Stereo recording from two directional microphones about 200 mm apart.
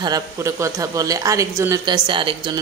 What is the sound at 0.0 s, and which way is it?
A woman's voice, 15° right (ahead or behind).